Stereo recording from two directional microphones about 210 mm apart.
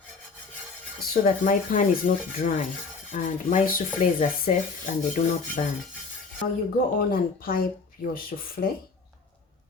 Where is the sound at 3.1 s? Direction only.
40° left (ahead or behind).